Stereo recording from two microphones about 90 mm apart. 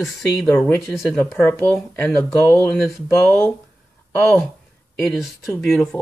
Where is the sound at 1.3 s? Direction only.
20° left (ahead or behind).